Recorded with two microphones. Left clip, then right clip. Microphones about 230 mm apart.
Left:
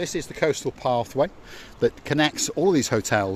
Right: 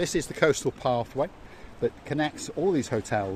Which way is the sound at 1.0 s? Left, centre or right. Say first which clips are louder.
Left 6 dB; left.